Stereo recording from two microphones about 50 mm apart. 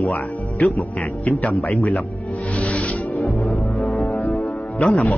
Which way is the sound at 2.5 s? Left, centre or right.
Left.